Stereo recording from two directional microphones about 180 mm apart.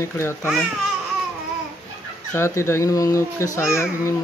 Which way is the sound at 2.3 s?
15° left (ahead or behind).